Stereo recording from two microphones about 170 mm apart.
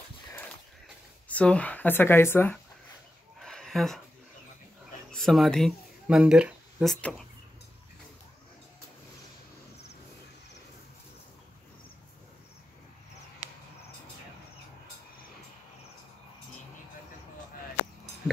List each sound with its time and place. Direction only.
1.3 s speech: 5° left (ahead or behind)
3.3 s a sound: centre (ahead or behind)
5.1 s speech: centre (ahead or behind)